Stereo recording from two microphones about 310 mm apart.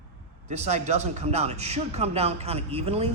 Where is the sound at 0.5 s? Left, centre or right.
Right.